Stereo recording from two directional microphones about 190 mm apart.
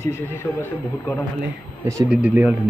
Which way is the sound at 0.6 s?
10° left (ahead or behind).